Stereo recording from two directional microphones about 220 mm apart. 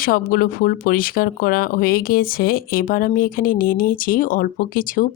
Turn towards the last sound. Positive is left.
turn(degrees=40)  # may be behind; listen again after turning